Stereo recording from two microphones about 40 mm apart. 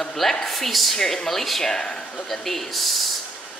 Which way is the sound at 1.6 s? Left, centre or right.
Centre.